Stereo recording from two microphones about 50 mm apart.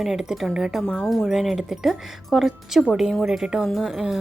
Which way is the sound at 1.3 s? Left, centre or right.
Centre.